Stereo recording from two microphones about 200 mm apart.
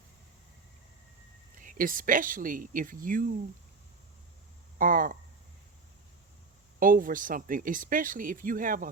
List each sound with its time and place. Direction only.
1.5 s speech: 40° right (ahead or behind)
4.8 s speech: 45° right (ahead or behind)
6.7 s speech: 45° right (ahead or behind)